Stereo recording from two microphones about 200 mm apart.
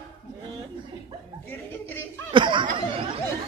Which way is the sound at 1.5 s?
10° left (ahead or behind).